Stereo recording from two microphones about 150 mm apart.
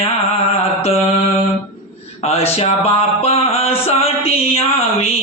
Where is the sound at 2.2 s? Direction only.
40° left (ahead or behind).